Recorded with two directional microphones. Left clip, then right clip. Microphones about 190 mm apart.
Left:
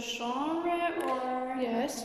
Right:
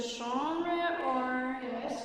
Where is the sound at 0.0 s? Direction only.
10° left (ahead or behind).